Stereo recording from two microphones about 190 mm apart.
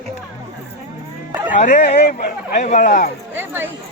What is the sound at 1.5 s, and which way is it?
Speech, 40° left (ahead or behind).